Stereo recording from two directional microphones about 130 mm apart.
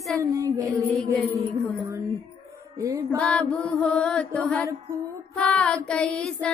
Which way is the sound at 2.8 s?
25° right (ahead or behind).